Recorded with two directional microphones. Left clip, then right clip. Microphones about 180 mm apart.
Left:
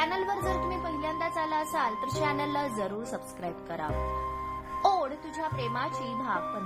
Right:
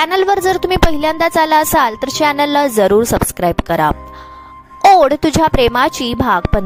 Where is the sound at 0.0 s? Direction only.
60° right (ahead or behind).